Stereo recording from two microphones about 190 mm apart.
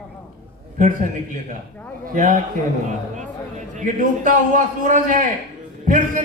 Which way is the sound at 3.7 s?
40° right (ahead or behind).